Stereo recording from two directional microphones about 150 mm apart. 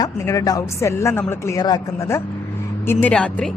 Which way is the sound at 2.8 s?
10° left (ahead or behind).